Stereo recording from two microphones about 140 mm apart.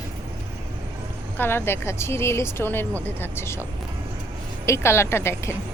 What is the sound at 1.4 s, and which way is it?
A woman's voice, 15° left (ahead or behind).